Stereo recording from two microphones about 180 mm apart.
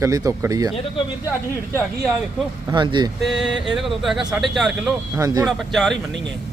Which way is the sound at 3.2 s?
5° right (ahead or behind).